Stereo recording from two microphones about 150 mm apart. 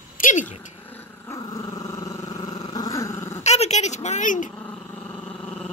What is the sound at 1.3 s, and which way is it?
Dog, 25° left (ahead or behind).